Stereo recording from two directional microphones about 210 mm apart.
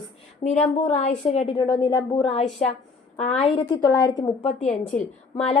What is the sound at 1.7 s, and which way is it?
A woman's voice, 15° left (ahead or behind).